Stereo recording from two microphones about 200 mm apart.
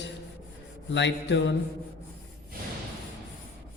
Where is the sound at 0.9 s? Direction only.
65° left (ahead or behind).